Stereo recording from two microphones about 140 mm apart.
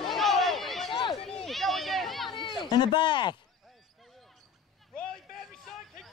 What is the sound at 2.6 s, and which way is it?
Speech, 30° left (ahead or behind).